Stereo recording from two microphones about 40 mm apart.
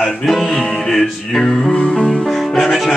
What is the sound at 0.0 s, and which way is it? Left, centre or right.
Music, centre.